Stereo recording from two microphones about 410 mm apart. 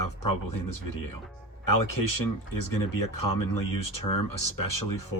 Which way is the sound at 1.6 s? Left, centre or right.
Left.